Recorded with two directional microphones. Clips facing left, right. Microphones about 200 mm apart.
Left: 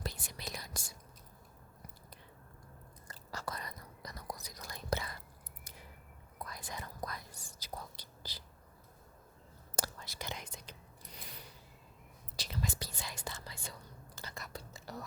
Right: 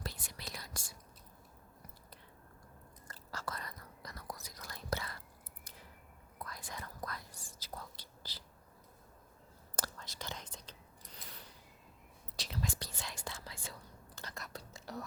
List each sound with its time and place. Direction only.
0.0 s whispering: 20° left (ahead or behind)
3.1 s whispering: 15° left (ahead or behind)
6.4 s whispering: 15° left (ahead or behind)
9.7 s whispering: 10° left (ahead or behind)
12.4 s whispering: centre (ahead or behind)